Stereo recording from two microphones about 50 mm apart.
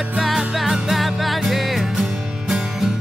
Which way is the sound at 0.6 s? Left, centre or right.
Centre.